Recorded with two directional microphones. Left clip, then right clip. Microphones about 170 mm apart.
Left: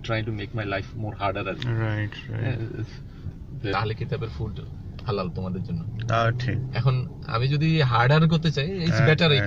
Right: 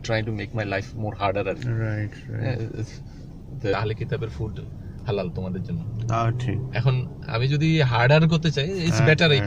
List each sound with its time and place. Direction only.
0.0 s speech: 15° right (ahead or behind)
1.6 s speech: 15° left (ahead or behind)
3.9 s a man's voice: 5° left (ahead or behind)
6.0 s speech: 25° left (ahead or behind)
6.7 s a man's voice: centre (ahead or behind)